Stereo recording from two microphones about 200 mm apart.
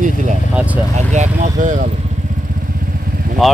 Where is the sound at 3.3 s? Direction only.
45° right (ahead or behind).